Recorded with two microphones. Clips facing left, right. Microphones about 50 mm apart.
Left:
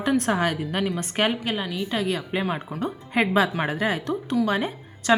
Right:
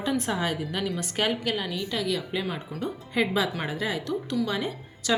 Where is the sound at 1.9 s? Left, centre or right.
Left.